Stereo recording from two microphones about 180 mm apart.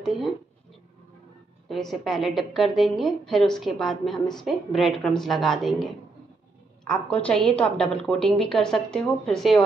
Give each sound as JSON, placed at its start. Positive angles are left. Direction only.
{"t": 1.7, "sound": "a woman's voice", "side_deg": 0}